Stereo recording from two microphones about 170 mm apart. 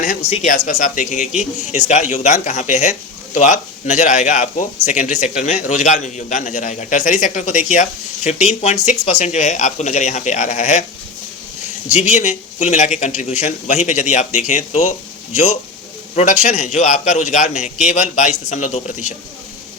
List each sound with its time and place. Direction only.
0.4 s a man's voice: 45° left (ahead or behind)
11.9 s a man's voice: 40° left (ahead or behind)